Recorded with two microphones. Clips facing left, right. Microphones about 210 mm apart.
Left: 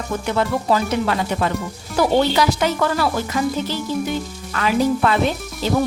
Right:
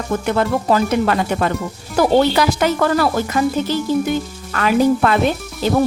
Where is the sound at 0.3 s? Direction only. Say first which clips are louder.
Right 2 dB; 55° right (ahead or behind).